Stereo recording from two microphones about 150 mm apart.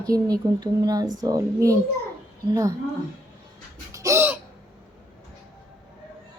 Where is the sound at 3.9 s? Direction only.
20° right (ahead or behind).